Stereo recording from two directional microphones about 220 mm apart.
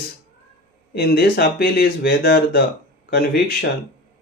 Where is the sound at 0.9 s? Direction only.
45° left (ahead or behind).